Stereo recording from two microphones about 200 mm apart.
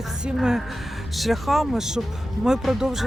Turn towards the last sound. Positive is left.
turn(degrees=0)  # may be behind; listen again after turning